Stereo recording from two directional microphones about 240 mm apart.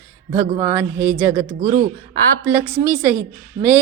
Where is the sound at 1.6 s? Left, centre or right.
Right.